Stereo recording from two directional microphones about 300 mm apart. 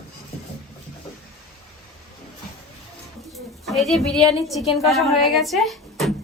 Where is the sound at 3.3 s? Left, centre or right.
Centre.